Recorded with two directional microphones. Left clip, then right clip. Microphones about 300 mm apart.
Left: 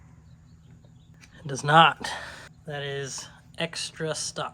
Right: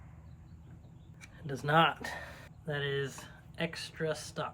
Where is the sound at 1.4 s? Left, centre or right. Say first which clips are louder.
Left 9 dB; centre.